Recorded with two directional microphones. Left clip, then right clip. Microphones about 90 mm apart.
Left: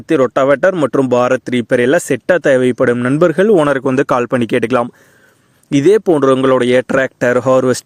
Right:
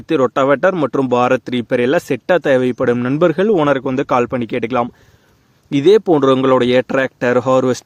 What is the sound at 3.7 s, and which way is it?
Speech, 85° left.